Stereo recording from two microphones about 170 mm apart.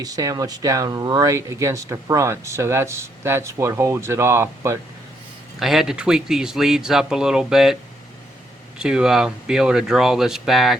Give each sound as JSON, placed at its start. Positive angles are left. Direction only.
{"t": 0.0, "sound": "speech", "side_deg": -20}
{"t": 5.5, "sound": "speech", "side_deg": 0}
{"t": 8.8, "sound": "speech", "side_deg": -5}